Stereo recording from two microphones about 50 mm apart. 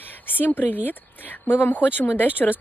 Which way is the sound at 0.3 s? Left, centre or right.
Left.